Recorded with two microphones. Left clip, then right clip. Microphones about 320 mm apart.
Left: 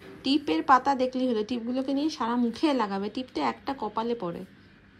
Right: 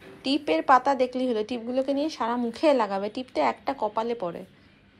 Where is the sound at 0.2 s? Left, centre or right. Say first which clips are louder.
Right 2 dB; centre.